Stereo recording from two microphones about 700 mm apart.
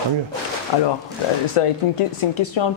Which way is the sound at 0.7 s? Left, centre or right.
Left.